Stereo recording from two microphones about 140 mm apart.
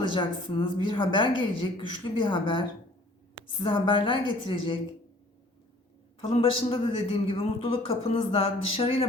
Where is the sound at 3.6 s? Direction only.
35° left (ahead or behind).